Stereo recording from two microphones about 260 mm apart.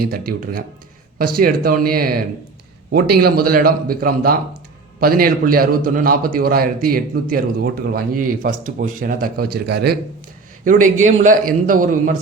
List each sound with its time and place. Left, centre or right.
1.4 s a man's voice: right